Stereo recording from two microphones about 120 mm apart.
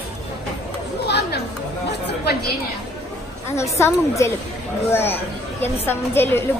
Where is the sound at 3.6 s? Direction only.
25° left (ahead or behind).